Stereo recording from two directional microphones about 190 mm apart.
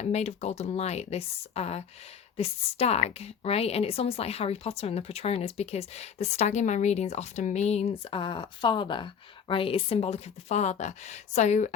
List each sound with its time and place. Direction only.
0.0 s a woman's voice: 35° left (ahead or behind)